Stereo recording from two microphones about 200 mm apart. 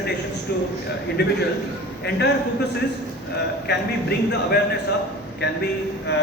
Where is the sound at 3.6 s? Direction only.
50° left (ahead or behind).